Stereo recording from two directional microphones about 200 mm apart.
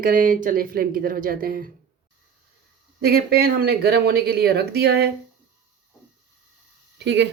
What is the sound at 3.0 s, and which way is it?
Speech, 50° right (ahead or behind).